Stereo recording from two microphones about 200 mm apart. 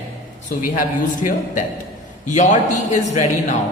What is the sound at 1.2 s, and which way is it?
A woman's voice, 30° left (ahead or behind).